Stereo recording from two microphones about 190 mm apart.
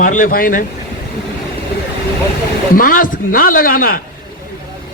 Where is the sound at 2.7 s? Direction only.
45° left (ahead or behind).